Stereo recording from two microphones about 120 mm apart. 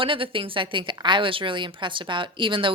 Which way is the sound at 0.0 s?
45° right (ahead or behind).